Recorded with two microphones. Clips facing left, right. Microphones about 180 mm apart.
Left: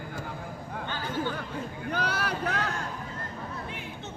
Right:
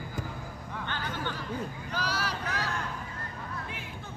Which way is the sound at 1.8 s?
55° left (ahead or behind).